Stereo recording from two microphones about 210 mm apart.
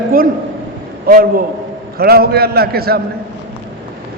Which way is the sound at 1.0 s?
45° right (ahead or behind).